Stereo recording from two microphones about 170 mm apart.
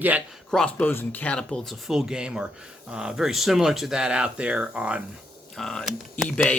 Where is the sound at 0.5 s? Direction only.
5° left (ahead or behind).